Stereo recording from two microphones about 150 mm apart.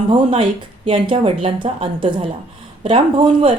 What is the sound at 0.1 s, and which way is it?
A woman's voice, 35° right (ahead or behind).